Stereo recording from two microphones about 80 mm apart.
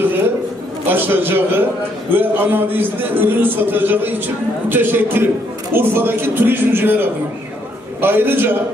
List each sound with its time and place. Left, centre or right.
0.8 s a man's voice: right